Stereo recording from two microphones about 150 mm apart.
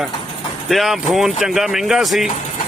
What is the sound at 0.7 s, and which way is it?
Speech, centre (ahead or behind).